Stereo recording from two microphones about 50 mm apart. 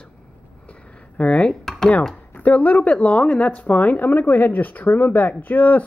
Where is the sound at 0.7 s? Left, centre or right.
Left.